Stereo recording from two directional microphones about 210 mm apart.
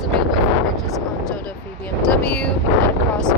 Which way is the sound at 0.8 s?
Centre (ahead or behind).